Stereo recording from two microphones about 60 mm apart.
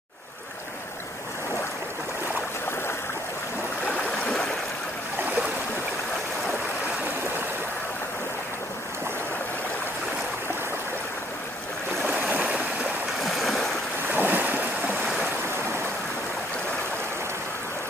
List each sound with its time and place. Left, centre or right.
3.8 s stream: left
12.1 s stream: right
13.2 s stream: centre
14.0 s waves: right